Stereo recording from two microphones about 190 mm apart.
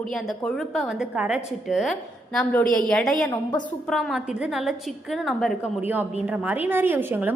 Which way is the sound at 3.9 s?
Centre (ahead or behind).